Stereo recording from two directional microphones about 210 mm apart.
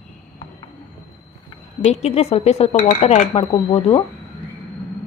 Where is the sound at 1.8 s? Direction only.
30° left (ahead or behind).